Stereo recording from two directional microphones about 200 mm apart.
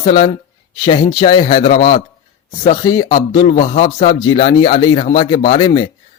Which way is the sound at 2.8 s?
20° left (ahead or behind).